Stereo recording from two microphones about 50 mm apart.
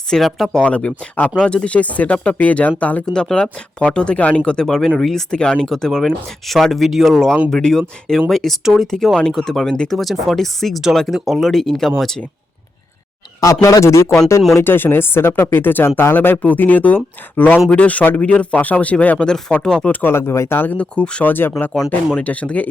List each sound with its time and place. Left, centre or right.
0.2 s speech: centre
0.5 s speech: left
3.1 s speech: centre
5.4 s speech: centre
5.6 s speech: centre
10.0 s speech: centre
13.5 s speech: left
14.6 s speech: left
16.4 s speech: left
19.8 s speech: left
20.1 s speech: left
20.7 s speech: left
21.2 s speech: left
21.8 s speech: left